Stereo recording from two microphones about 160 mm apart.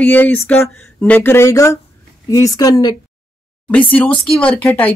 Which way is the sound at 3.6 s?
10° left (ahead or behind).